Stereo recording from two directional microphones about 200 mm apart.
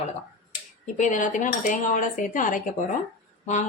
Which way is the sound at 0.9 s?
40° left (ahead or behind).